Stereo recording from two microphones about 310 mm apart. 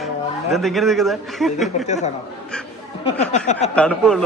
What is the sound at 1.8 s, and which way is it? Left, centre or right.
Speech, left.